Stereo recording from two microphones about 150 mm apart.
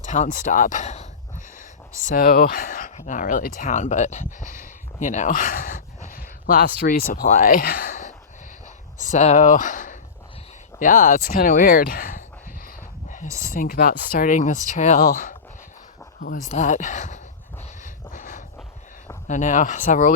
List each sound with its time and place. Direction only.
0.0 s speech: 55° left (ahead or behind)
2.0 s speech: 75° left (ahead or behind); by 4.5 s 55° left (ahead or behind)
4.6 s a sound: 60° left (ahead or behind)
9.0 s speech: 50° left (ahead or behind); by 12.2 s 70° left (ahead or behind)
13.5 s speech: 70° left (ahead or behind)
16.5 s speech: 50° left (ahead or behind)
17.8 s a sound: 60° left (ahead or behind)
19.3 s speech: 55° left (ahead or behind)